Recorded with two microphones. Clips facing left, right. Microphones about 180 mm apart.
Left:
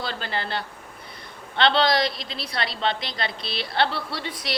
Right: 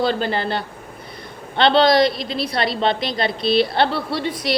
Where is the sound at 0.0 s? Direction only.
15° right (ahead or behind).